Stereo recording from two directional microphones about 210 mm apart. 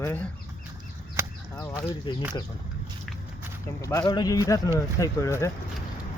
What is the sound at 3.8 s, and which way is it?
A man's voice, 15° left (ahead or behind).